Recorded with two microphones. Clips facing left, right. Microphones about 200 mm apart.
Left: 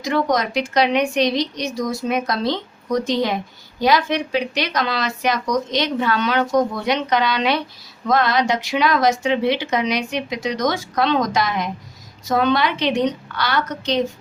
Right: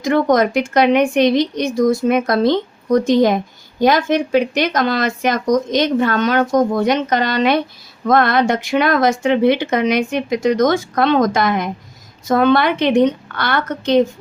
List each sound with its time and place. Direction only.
0.0 s a woman's voice: 50° right (ahead or behind)